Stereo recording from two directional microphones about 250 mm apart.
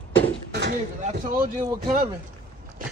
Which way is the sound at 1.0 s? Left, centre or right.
Right.